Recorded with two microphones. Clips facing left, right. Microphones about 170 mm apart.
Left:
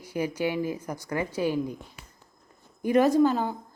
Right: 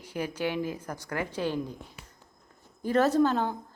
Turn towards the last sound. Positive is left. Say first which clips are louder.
# left 2 dB
turn(degrees=10)  # may be behind; listen again after turning